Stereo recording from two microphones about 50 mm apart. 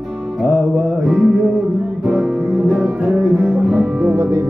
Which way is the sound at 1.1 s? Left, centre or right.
Centre.